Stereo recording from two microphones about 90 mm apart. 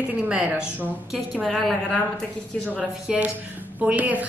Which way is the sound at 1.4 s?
5° left (ahead or behind).